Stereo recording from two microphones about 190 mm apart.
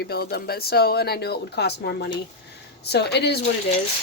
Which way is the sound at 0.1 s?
55° left (ahead or behind).